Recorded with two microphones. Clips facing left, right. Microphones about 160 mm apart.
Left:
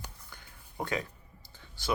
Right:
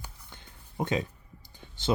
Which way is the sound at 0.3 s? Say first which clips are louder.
Right 1 dB; 20° right (ahead or behind).